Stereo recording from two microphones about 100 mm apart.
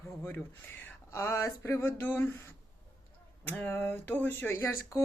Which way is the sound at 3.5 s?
15° left (ahead or behind).